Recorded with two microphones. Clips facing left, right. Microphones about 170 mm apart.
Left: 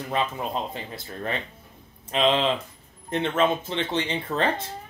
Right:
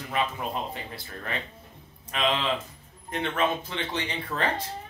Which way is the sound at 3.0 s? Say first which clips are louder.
Left 4 dB; 25° left (ahead or behind).